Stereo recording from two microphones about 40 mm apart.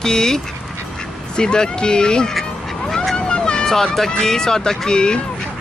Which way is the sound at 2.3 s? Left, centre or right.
Centre.